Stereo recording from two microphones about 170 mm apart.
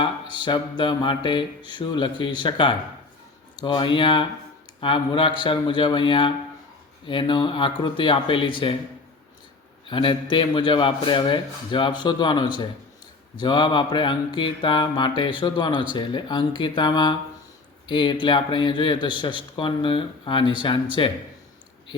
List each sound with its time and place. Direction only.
0.0 s mantra: 25° left (ahead or behind)
9.8 s mantra: 30° left (ahead or behind)